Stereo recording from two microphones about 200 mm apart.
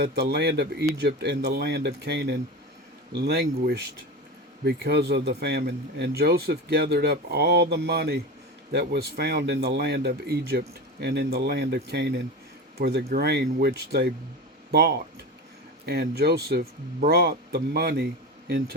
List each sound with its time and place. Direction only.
0.0 s speech: 55° right (ahead or behind)